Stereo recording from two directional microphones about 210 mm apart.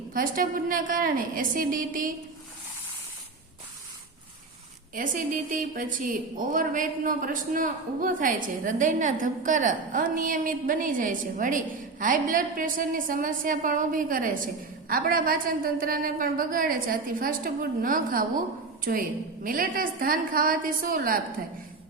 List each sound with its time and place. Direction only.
0.1 s a woman's voice: 40° right (ahead or behind)
4.9 s a woman's voice: 40° right (ahead or behind)